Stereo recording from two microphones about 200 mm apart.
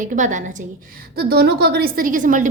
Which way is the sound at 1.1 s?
50° right (ahead or behind).